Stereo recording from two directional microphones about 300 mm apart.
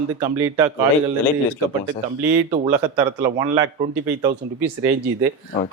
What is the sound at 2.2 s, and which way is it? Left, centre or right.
A man's voice, centre.